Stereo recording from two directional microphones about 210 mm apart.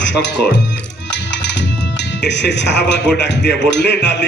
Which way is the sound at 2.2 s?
55° left (ahead or behind).